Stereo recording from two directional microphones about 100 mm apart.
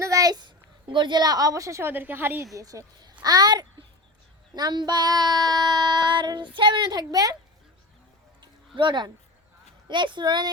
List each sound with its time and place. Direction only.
0.0 s a woman's voice: 35° right (ahead or behind)
2.6 s a child's voice: 35° right (ahead or behind)
4.5 s child singing: 45° right (ahead or behind)
8.4 s a sound: 55° right (ahead or behind)
9.9 s child singing: 55° right (ahead or behind)